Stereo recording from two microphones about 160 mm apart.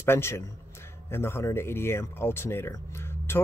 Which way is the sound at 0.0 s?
15° left (ahead or behind).